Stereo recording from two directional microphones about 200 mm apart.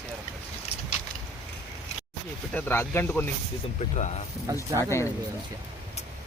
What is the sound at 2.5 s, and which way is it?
Speech, 10° left (ahead or behind).